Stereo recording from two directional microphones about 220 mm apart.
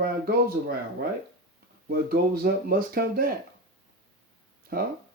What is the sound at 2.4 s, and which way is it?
Speech, 45° right (ahead or behind).